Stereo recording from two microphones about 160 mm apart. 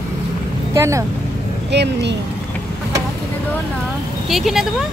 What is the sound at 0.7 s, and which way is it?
Speech, 20° right (ahead or behind).